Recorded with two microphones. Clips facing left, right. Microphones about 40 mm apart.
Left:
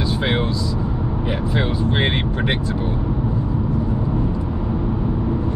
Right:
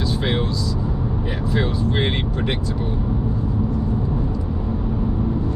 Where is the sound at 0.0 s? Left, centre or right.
Left.